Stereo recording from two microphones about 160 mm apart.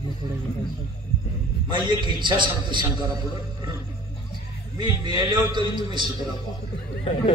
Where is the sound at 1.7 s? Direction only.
30° right (ahead or behind).